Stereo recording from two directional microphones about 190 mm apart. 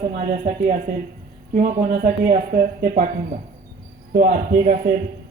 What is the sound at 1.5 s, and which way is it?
A man's voice, 35° right (ahead or behind).